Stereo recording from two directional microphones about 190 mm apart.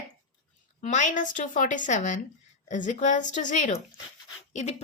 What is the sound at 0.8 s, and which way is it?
Speech, 40° left (ahead or behind).